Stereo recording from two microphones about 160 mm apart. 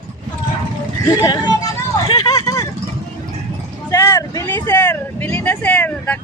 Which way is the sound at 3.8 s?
15° left (ahead or behind).